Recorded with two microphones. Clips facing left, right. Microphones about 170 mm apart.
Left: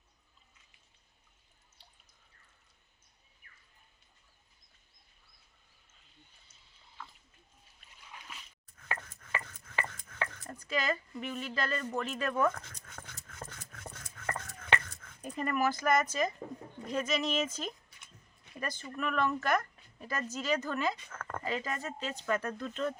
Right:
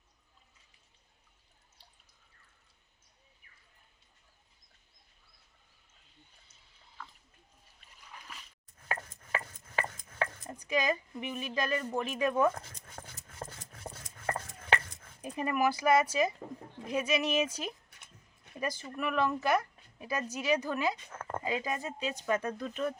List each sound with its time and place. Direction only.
8.1 s a sound: centre (ahead or behind)
8.8 s chopping: 30° right (ahead or behind)
9.0 s a sound: 15° right (ahead or behind)
9.5 s chopping: 30° right (ahead or behind)
10.3 s speech: 15° right (ahead or behind)
12.5 s dog: 30° right (ahead or behind)
13.8 s dog: 10° right (ahead or behind)
14.8 s a sound: 15° right (ahead or behind)
15.4 s speech: 10° right (ahead or behind)